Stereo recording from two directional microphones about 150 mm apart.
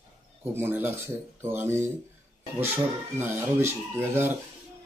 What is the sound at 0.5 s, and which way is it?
A man's voice, 15° right (ahead or behind).